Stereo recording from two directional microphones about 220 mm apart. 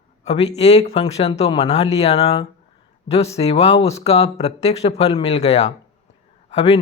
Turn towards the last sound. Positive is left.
turn(degrees=25)  # may be behind; listen again after turning